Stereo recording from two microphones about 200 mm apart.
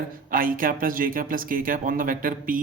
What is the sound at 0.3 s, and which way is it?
Speech, 45° right (ahead or behind).